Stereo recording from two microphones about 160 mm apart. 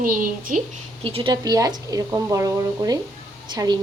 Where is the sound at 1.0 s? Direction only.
35° right (ahead or behind); by 2.9 s 20° right (ahead or behind).